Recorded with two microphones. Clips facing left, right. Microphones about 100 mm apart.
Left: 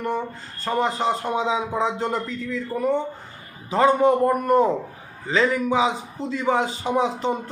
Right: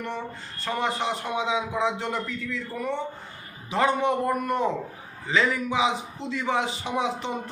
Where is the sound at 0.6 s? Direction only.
40° left (ahead or behind).